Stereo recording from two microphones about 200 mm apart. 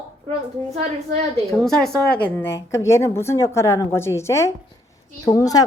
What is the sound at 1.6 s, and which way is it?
A woman's voice, centre (ahead or behind).